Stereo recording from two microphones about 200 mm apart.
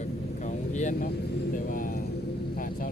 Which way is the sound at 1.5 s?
45° left (ahead or behind).